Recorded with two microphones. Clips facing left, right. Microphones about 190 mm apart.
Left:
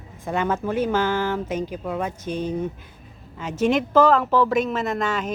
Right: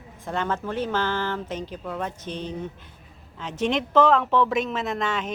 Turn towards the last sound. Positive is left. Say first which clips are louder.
# left 3 dB
turn(degrees=0)  # may be behind; listen again after turning